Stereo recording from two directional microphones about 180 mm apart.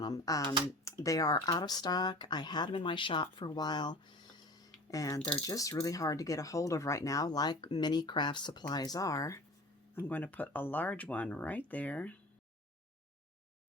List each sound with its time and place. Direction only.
0.0 s speech: 20° left (ahead or behind)
4.5 s tick-tock: 20° left (ahead or behind)
5.5 s speech: 20° left (ahead or behind)